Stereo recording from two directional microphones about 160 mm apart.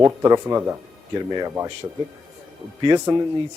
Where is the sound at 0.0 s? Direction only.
20° right (ahead or behind).